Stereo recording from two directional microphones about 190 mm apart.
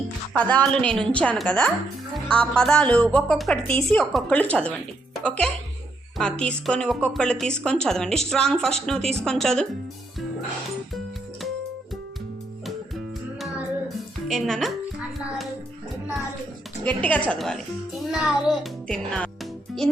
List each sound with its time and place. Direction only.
0.3 s a woman's voice: 5° left (ahead or behind)
13.4 s music: centre (ahead or behind)
17.0 s a woman's voice: 5° left (ahead or behind)